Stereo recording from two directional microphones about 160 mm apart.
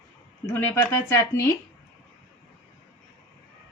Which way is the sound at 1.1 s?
20° left (ahead or behind).